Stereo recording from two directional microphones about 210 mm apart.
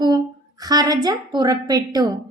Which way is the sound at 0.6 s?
20° right (ahead or behind).